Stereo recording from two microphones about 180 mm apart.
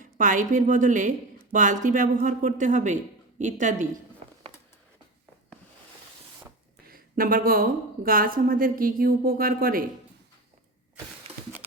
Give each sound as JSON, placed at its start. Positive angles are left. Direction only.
{"t": 0.0, "sound": "a woman's voice", "side_deg": -45}
{"t": 6.8, "sound": "a woman's voice", "side_deg": -50}
{"t": 11.3, "sound": "a sound", "side_deg": -35}